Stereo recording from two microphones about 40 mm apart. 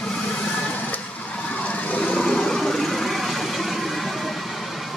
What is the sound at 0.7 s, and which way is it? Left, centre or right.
Vehicle, left.